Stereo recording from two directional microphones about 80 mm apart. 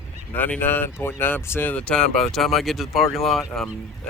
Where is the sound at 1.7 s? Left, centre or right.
Centre.